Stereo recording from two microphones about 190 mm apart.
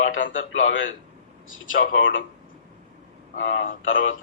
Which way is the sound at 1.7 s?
50° left (ahead or behind).